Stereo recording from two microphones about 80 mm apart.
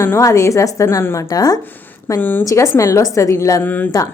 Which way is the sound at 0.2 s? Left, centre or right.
Left.